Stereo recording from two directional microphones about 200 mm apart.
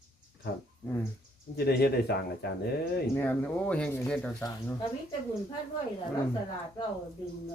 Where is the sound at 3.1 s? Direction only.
10° left (ahead or behind).